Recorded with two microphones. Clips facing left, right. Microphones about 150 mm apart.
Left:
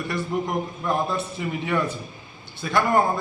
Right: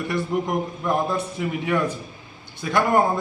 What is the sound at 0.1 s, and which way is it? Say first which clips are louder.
A man's voice: right 2 dB; 15° right (ahead or behind).